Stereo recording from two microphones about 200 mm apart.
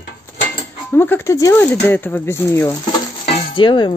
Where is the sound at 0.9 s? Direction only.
10° left (ahead or behind).